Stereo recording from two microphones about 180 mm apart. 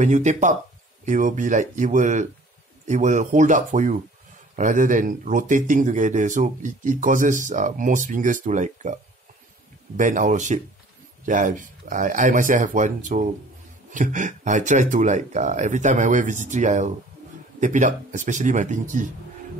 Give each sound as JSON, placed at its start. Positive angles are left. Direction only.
{"t": 0.0, "sound": "speech", "side_deg": -40}